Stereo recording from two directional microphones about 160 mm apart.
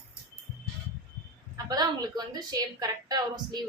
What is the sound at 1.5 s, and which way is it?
A woman's voice, 25° right (ahead or behind).